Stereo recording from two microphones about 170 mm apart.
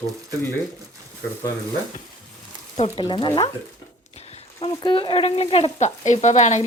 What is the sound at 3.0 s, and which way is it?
Speech, 25° left (ahead or behind).